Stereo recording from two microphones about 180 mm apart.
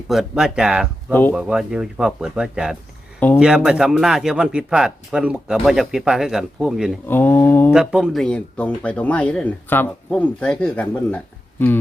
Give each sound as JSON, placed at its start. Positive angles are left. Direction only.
{"t": 0.1, "sound": "speech", "side_deg": 0}
{"t": 1.1, "sound": "speech", "side_deg": 10}
{"t": 1.4, "sound": "speech", "side_deg": -5}
{"t": 7.1, "sound": "speech", "side_deg": 10}
{"t": 7.7, "sound": "speech", "side_deg": -5}